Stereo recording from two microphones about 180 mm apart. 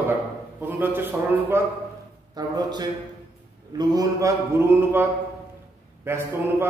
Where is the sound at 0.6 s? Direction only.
10° right (ahead or behind).